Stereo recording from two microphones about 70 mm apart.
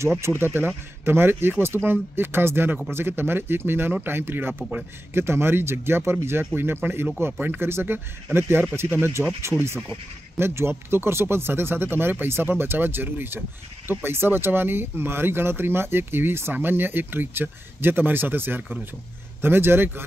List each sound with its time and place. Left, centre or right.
0.2 s speech: right